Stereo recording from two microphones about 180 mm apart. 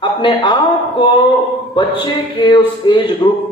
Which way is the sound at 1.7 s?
25° left (ahead or behind).